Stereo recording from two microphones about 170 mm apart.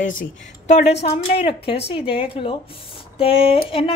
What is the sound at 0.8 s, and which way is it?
Speech, 75° left (ahead or behind).